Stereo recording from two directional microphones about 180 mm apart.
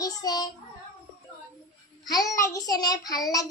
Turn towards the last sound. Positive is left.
turn(degrees=20)  # may be behind; listen again after turning